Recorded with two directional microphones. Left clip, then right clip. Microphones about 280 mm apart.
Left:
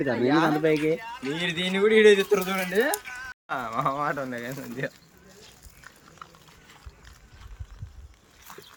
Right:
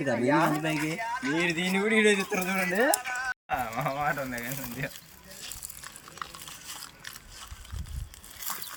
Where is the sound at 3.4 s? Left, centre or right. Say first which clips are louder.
Left 8 dB; centre.